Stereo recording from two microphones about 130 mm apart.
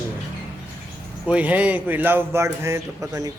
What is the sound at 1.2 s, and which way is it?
Speech, 10° right (ahead or behind).